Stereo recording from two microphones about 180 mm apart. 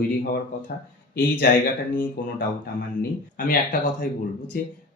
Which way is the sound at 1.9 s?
50° left (ahead or behind).